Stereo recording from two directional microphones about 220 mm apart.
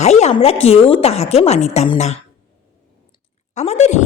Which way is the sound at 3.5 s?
30° left (ahead or behind).